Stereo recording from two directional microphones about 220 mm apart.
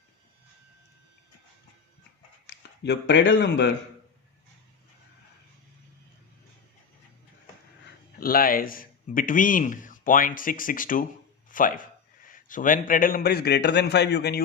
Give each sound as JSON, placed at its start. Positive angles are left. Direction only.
{"t": 2.5, "sound": "speech", "side_deg": 50}
{"t": 8.2, "sound": "a man's voice", "side_deg": 40}